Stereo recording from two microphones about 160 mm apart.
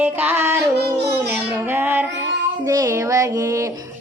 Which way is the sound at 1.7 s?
10° right (ahead or behind).